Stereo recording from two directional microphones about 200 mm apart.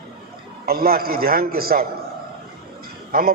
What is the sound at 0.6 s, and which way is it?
A man's voice, 50° right (ahead or behind).